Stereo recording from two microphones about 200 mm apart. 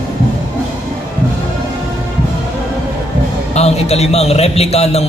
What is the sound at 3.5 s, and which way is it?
A man's voice, 30° left (ahead or behind).